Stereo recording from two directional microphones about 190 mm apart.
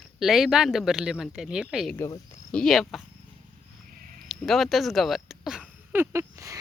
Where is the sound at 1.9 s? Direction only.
15° left (ahead or behind).